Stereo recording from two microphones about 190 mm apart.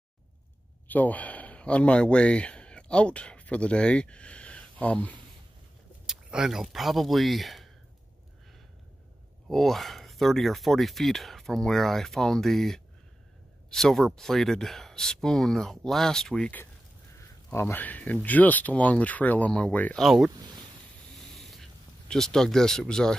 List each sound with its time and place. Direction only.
0.8 s speech: 10° left (ahead or behind)
6.0 s speech: 5° right (ahead or behind)
9.5 s speech: centre (ahead or behind)
20.2 s speech: 20° right (ahead or behind)
21.2 s a sound: centre (ahead or behind)